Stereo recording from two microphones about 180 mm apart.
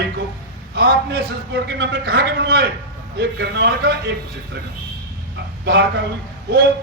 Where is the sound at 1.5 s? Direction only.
75° right (ahead or behind).